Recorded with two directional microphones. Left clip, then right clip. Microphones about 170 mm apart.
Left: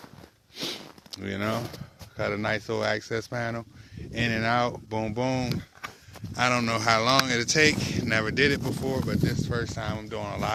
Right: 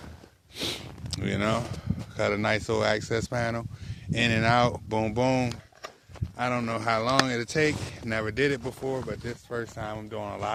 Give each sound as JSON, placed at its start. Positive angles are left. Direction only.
{"t": 0.5, "sound": "sniff", "side_deg": -35}
{"t": 2.1, "sound": "speech", "side_deg": -35}
{"t": 5.3, "sound": "speech", "side_deg": -80}
{"t": 6.1, "sound": "speech", "side_deg": 20}
{"t": 8.4, "sound": "speech", "side_deg": -5}